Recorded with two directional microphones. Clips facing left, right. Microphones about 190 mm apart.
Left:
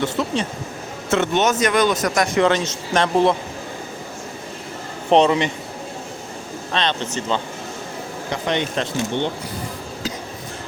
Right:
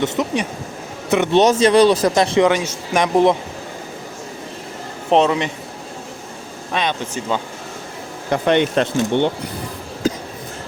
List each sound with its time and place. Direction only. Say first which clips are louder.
0.0 s speech: right 2 dB; 20° right (ahead or behind)
1.3 s speech: right 9 dB; 30° right (ahead or behind)
2.4 s a man's voice: right 2 dB; 10° right (ahead or behind)
5.1 s speech: even; centre (ahead or behind)
6.7 s a man's voice: right 1 dB; 10° right (ahead or behind)
8.3 s speech: right 7 dB; 55° right (ahead or behind)
10.0 s a sound: right 9 dB; 50° right (ahead or behind)